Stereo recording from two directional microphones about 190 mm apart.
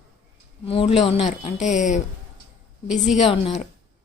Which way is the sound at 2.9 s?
Centre (ahead or behind).